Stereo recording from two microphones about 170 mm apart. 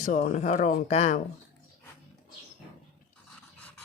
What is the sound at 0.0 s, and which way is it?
Speech, 45° left (ahead or behind).